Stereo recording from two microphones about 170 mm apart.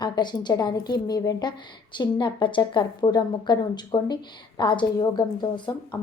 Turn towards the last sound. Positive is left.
turn(degrees=25)  # may be behind; listen again after turning